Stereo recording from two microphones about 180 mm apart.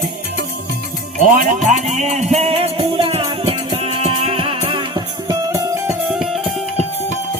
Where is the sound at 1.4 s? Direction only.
45° right (ahead or behind); by 5.8 s 15° right (ahead or behind).